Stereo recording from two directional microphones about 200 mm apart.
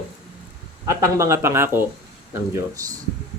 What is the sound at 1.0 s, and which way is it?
Speech, 15° right (ahead or behind).